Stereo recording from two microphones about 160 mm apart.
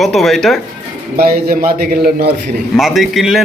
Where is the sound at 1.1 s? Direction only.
70° right (ahead or behind).